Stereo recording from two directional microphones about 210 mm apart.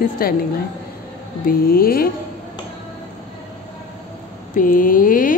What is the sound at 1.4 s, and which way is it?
Speech, 45° left (ahead or behind).